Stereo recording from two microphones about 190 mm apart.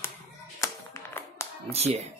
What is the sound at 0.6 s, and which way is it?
Clapping, 15° left (ahead or behind).